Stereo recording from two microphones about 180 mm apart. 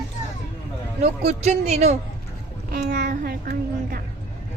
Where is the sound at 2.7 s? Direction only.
65° right (ahead or behind).